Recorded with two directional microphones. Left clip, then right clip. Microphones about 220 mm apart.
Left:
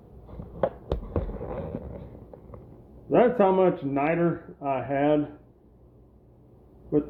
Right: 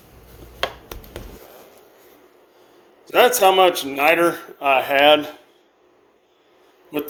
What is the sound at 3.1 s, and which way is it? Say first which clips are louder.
A man's voice: right 6 dB; 35° right (ahead or behind).